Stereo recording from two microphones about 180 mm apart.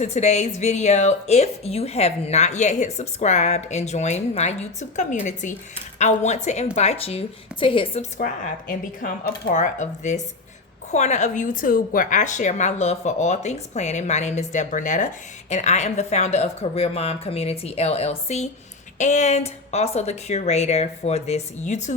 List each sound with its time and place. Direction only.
0.0 s a woman's voice: 40° left (ahead or behind)
8.2 s a woman's voice: 45° left (ahead or behind)